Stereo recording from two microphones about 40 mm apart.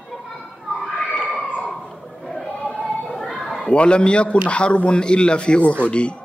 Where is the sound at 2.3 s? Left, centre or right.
Centre.